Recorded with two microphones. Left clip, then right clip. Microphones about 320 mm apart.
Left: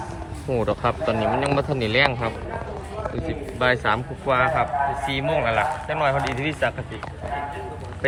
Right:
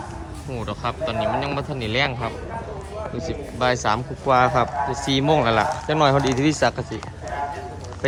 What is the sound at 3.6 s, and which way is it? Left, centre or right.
A man's voice, centre.